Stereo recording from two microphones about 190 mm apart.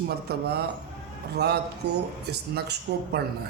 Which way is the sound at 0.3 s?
55° right (ahead or behind).